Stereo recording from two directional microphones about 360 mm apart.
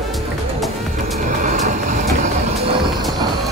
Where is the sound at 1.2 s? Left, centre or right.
Right.